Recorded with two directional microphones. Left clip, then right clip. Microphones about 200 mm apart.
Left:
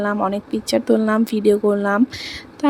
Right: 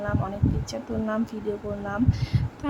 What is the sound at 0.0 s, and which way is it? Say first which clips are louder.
A woman's voice: left 9 dB; 35° left (ahead or behind).